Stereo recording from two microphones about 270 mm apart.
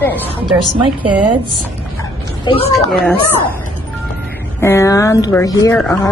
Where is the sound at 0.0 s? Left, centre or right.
Centre.